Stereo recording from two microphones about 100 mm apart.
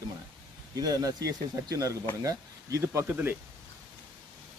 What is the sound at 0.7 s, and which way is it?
Speech, 40° right (ahead or behind).